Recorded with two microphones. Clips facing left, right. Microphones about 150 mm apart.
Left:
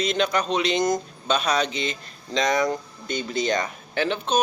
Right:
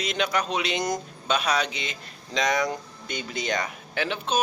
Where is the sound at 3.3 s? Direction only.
30° left (ahead or behind).